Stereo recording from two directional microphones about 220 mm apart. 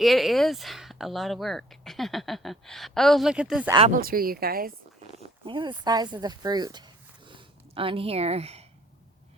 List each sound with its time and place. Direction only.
0.0 s speech: centre (ahead or behind)
3.7 s speech: 25° right (ahead or behind)
3.9 s speech: 40° right (ahead or behind)
5.5 s speech: 20° right (ahead or behind)
7.3 s a sound: 25° right (ahead or behind)